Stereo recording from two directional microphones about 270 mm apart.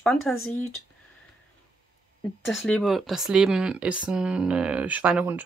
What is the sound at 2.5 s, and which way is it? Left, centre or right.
Speech, centre.